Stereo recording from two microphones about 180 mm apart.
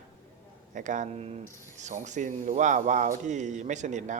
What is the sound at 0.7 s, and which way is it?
A man's voice, 45° right (ahead or behind).